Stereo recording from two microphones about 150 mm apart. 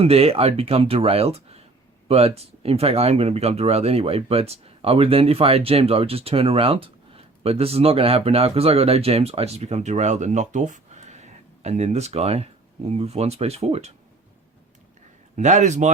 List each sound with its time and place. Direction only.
0.0 s speech: 40° right (ahead or behind)
15.4 s speech: 55° right (ahead or behind)